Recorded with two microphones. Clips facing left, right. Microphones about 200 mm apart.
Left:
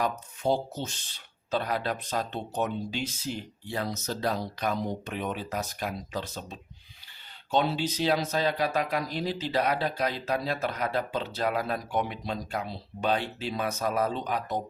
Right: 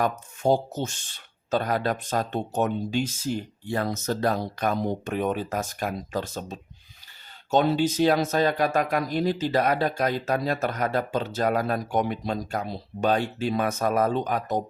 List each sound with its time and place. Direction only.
0.0 s speech: 45° right (ahead or behind)